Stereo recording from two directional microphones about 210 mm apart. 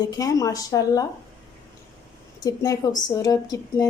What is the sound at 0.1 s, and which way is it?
Speech, 15° left (ahead or behind).